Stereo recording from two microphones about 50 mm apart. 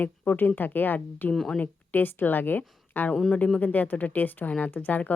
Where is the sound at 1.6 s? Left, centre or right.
Left.